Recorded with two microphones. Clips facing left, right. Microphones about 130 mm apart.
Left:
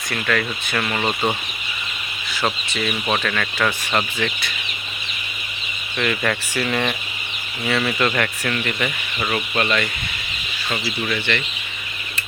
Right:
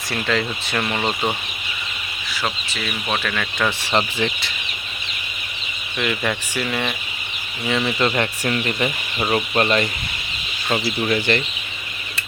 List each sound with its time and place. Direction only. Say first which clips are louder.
0.1 s speech: even; 20° right (ahead or behind)
2.3 s speech: left 3 dB; centre (ahead or behind)
3.9 s speech: right 2 dB; 25° right (ahead or behind)
6.0 s speech: left 1 dB; 10° right (ahead or behind); by 11.4 s 35° right (ahead or behind)